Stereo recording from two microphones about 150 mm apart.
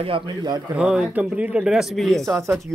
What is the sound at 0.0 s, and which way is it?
Speech, 30° right (ahead or behind).